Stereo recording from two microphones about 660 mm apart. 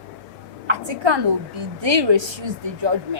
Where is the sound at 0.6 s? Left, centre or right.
Right.